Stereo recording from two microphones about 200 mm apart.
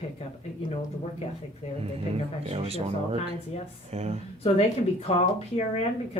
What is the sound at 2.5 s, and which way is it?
Speech, 30° right (ahead or behind).